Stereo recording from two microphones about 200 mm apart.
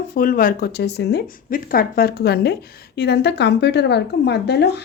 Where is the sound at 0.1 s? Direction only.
45° left (ahead or behind).